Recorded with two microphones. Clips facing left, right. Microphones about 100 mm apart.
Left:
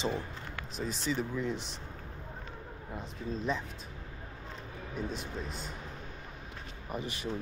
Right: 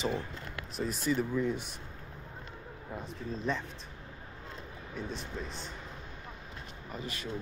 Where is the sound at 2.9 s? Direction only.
Centre (ahead or behind).